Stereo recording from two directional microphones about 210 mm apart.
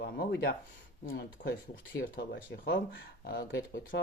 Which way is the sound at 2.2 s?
55° left (ahead or behind).